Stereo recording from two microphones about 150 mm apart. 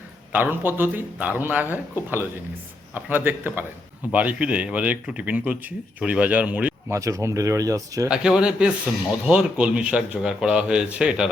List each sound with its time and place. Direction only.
0.3 s a man's voice: 15° right (ahead or behind)
6.9 s speech: 20° right (ahead or behind)
8.1 s a man's voice: 5° right (ahead or behind)